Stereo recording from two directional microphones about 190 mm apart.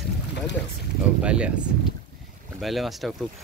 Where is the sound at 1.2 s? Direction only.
5° right (ahead or behind).